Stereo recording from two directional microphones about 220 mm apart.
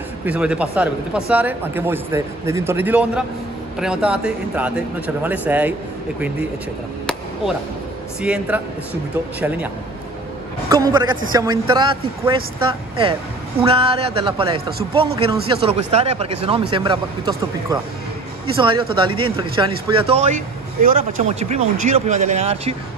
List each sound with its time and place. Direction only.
0.2 s a man's voice: 5° right (ahead or behind)
8.2 s speech: 5° right (ahead or behind)
10.7 s a man's voice: 15° right (ahead or behind)
13.6 s speech: 25° right (ahead or behind)